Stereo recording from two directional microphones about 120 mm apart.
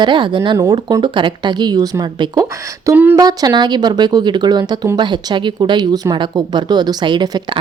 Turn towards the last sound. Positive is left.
turn(degrees=-40)  # may be behind; listen again after turning